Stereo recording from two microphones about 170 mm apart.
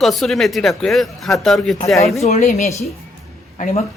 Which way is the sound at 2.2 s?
40° left (ahead or behind).